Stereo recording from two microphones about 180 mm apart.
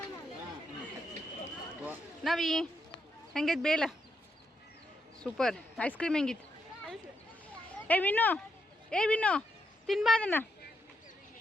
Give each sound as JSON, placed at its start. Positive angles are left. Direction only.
{"t": 1.8, "sound": "a sound", "side_deg": -5}
{"t": 3.3, "sound": "speech", "side_deg": 0}
{"t": 5.2, "sound": "speech", "side_deg": 5}
{"t": 7.9, "sound": "speech", "side_deg": 10}